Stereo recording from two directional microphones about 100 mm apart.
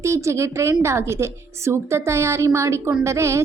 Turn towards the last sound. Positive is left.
turn(degrees=-30)  # may be behind; listen again after turning